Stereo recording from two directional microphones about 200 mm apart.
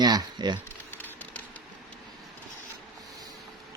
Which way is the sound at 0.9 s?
10° left (ahead or behind).